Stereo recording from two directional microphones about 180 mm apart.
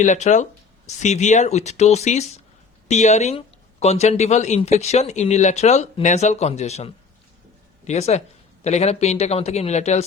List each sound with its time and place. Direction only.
0.0 s speech: 40° left (ahead or behind)